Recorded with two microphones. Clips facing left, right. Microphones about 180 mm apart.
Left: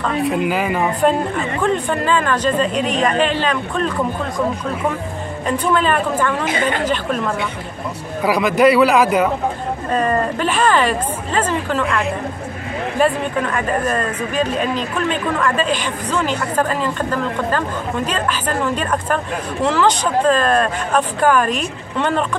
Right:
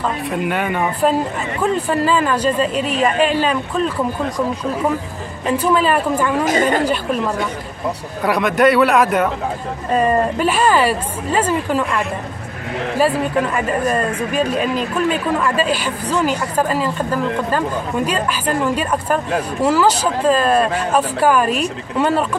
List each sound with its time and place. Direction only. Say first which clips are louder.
0.0 s speech: left 3 dB; centre (ahead or behind)
5.5 s speech: right 2 dB; 5° right (ahead or behind)
6.4 s a woman's voice: right 4 dB; 40° right (ahead or behind)
8.2 s speech: left 1 dB; centre (ahead or behind)
13.0 s speech: right 1 dB; 10° right (ahead or behind)